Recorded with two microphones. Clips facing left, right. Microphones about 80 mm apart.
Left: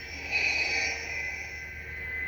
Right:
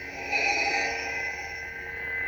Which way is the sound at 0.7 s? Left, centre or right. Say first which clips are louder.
Right 5 dB; right.